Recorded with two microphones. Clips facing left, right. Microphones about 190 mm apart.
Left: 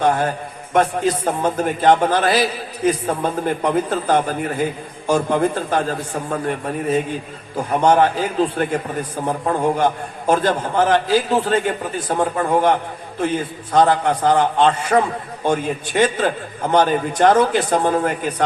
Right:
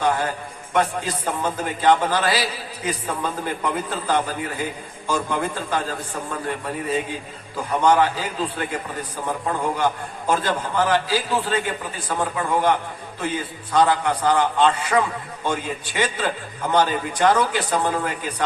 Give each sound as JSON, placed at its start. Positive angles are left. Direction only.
{"t": 0.0, "sound": "a man's voice", "side_deg": 50}
{"t": 7.5, "sound": "a man's voice", "side_deg": 45}